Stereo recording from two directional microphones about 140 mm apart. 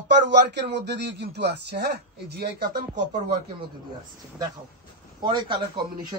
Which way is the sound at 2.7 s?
65° right (ahead or behind).